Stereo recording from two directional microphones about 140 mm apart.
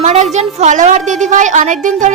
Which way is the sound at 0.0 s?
55° right (ahead or behind).